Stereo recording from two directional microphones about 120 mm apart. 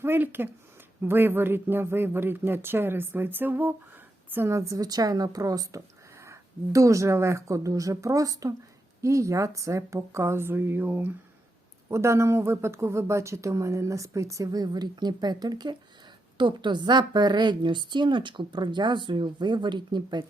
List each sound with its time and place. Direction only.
0.0 s speech: 20° right (ahead or behind)
4.7 s a woman's voice: 30° right (ahead or behind)